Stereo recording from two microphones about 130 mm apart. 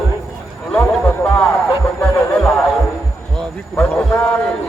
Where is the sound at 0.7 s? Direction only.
10° left (ahead or behind).